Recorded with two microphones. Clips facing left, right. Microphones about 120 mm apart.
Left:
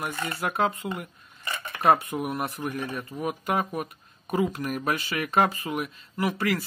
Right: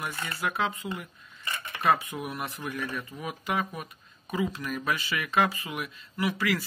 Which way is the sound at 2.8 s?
25° left (ahead or behind).